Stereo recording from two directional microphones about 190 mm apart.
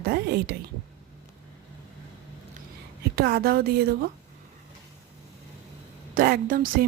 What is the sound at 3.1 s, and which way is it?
Speech, 55° right (ahead or behind).